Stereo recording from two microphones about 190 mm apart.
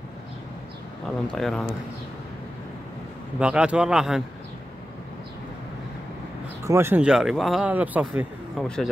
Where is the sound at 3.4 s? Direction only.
5° right (ahead or behind).